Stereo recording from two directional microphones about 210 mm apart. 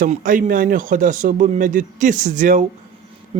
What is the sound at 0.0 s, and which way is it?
Speech, 40° right (ahead or behind).